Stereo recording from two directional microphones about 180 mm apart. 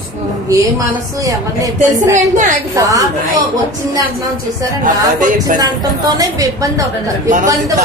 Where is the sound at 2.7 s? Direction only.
20° right (ahead or behind).